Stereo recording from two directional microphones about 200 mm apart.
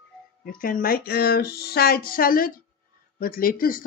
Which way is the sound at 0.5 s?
45° left (ahead or behind).